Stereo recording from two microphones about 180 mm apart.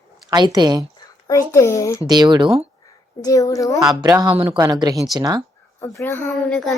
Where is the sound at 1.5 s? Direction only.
15° left (ahead or behind).